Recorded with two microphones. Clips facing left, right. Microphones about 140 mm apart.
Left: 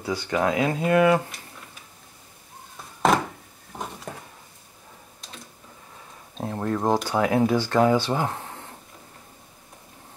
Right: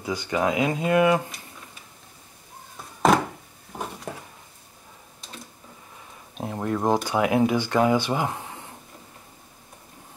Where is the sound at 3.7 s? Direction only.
10° right (ahead or behind).